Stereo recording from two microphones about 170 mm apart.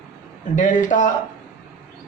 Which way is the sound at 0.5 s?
50° left (ahead or behind).